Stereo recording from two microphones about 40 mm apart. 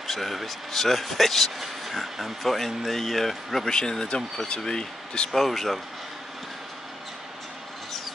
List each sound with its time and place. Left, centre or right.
0.0 s speech: centre
3.7 s speech: centre
5.3 s speech: centre